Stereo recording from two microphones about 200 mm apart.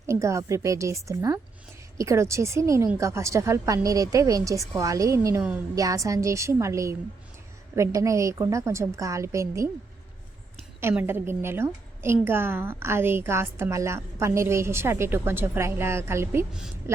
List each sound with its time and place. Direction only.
0.1 s a woman's voice: 15° right (ahead or behind)
10.8 s a woman's voice: 10° right (ahead or behind)